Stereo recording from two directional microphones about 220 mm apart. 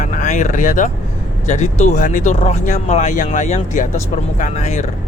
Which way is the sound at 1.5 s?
35° left (ahead or behind).